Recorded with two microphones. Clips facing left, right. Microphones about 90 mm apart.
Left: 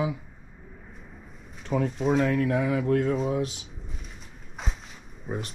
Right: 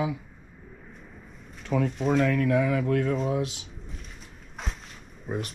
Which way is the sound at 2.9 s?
25° left (ahead or behind).